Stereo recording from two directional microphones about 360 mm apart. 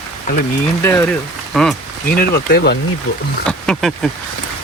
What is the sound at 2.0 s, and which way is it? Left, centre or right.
Speech, left.